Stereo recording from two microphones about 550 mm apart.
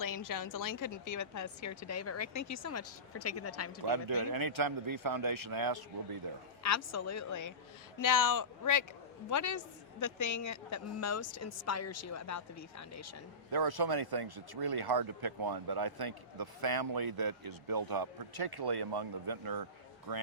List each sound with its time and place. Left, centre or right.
0.0 s a woman's voice: left
3.8 s speech: right
6.6 s a woman's voice: left
13.5 s speech: right